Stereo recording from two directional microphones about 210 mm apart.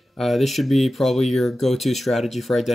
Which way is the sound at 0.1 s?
Centre (ahead or behind).